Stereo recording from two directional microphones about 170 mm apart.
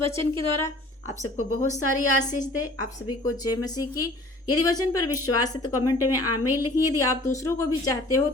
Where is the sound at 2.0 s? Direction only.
50° left (ahead or behind).